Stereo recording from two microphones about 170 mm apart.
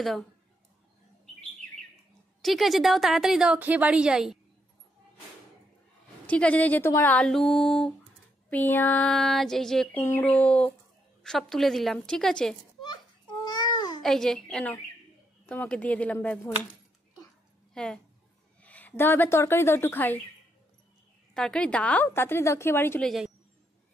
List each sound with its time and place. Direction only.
2.4 s a woman's voice: centre (ahead or behind)
6.2 s a woman's voice: 10° left (ahead or behind)
13.5 s a sound: 25° left (ahead or behind)
14.0 s a woman's voice: centre (ahead or behind)
17.7 s a woman's voice: 5° left (ahead or behind)
21.3 s a woman's voice: 5° left (ahead or behind)
23.0 s a woman's voice: centre (ahead or behind)